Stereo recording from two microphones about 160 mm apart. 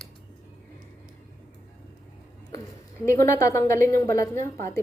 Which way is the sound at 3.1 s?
15° left (ahead or behind).